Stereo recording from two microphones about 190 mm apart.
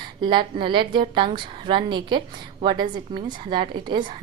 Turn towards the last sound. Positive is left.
turn(degrees=-25)  # may be behind; listen again after turning